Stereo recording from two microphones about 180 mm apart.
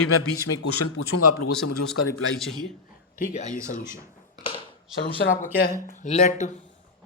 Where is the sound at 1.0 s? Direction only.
90° left.